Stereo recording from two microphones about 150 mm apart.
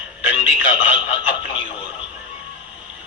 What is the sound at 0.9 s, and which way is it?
Speech, 40° left (ahead or behind).